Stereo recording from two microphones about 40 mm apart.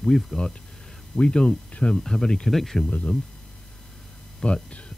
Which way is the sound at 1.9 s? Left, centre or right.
Centre.